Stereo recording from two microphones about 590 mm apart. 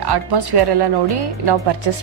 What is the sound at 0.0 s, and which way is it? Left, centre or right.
A woman's voice, right.